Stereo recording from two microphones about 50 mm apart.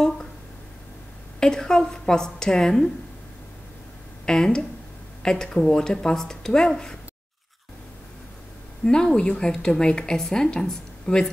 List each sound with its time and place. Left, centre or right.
1.4 s a woman's voice: centre
4.3 s a woman's voice: centre
8.8 s a woman's voice: centre